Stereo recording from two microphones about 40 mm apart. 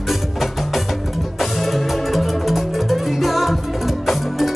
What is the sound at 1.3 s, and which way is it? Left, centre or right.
Music, centre.